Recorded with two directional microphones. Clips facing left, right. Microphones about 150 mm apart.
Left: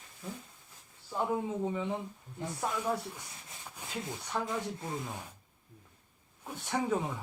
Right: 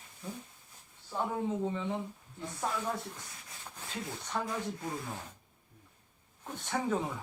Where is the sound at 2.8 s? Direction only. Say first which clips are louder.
Left 3 dB; 10° left (ahead or behind).